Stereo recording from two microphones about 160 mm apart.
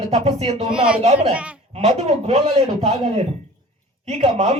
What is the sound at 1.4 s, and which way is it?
Speech, 10° right (ahead or behind).